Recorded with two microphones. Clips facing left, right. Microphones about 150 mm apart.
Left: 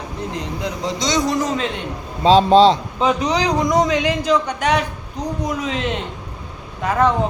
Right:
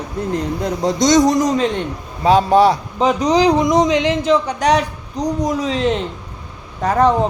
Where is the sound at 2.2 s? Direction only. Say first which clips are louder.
Left 1 dB; 20° left (ahead or behind).